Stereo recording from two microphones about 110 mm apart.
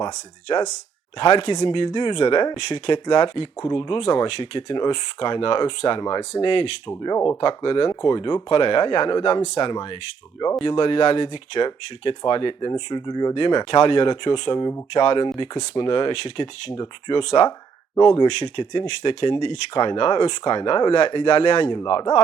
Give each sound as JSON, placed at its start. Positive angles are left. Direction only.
{"t": 0.0, "sound": "speech", "side_deg": 40}
{"t": 3.6, "sound": "speech", "side_deg": 30}
{"t": 3.8, "sound": "speech", "side_deg": 45}
{"t": 16.7, "sound": "speech", "side_deg": 35}
{"t": 17.2, "sound": "speech", "side_deg": 50}
{"t": 21.8, "sound": "speech", "side_deg": 40}